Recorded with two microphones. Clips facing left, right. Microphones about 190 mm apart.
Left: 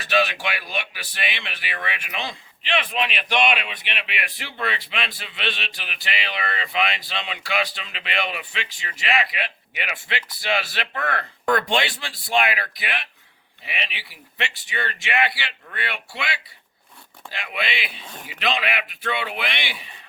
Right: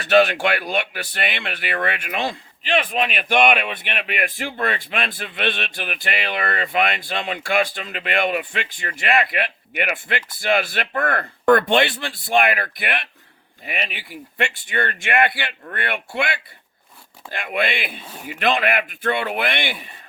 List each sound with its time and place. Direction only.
0.0 s speech: 55° right (ahead or behind)
18.0 s speech: 5° right (ahead or behind)
18.3 s speech: 50° right (ahead or behind)